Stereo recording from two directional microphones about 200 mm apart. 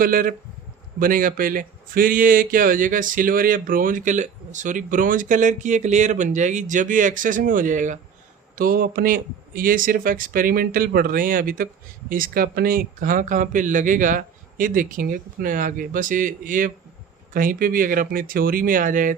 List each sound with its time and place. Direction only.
0.0 s speech: 45° right (ahead or behind)